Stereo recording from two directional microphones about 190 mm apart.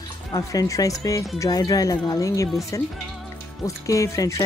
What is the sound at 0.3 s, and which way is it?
Speech, 20° left (ahead or behind).